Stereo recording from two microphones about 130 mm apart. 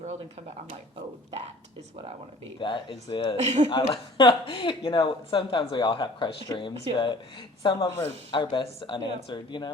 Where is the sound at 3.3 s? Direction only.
60° right (ahead or behind).